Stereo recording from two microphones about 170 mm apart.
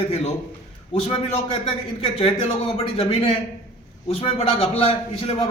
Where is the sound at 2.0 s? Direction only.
35° left (ahead or behind).